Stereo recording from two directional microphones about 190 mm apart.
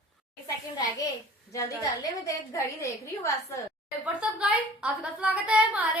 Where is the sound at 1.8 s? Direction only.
15° left (ahead or behind).